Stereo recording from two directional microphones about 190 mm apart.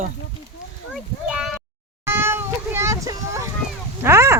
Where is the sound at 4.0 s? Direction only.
15° right (ahead or behind).